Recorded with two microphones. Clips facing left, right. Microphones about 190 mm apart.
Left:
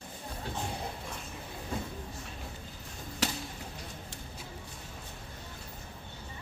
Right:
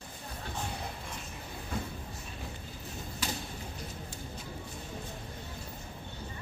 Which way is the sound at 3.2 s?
80° left.